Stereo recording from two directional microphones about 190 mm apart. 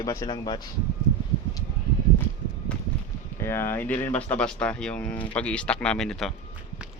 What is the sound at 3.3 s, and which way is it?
Speech, 15° left (ahead or behind).